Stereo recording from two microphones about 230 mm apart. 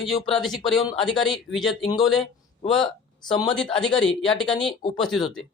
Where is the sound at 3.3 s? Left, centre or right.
Centre.